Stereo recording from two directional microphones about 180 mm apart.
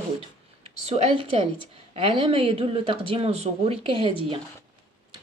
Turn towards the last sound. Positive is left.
turn(degrees=-30)  # may be behind; listen again after turning